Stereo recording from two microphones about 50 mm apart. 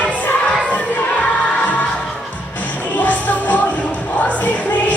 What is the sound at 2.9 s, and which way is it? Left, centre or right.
Music, left.